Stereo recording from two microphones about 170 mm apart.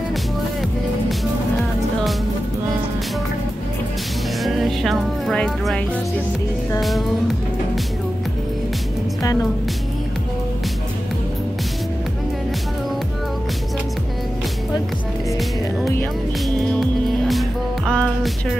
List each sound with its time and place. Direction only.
0.1 s music: centre (ahead or behind)
4.4 s music: centre (ahead or behind)
6.8 s music: centre (ahead or behind)
9.2 s music: 20° left (ahead or behind)
16.4 s music: centre (ahead or behind)